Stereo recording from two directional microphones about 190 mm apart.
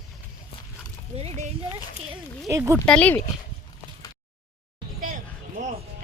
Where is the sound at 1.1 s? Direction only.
35° right (ahead or behind).